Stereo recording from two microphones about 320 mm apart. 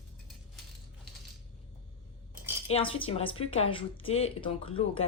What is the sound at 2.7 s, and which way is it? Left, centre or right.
A woman's voice, centre.